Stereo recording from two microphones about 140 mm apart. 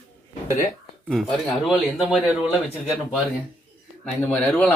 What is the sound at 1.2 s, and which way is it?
Speech, centre (ahead or behind).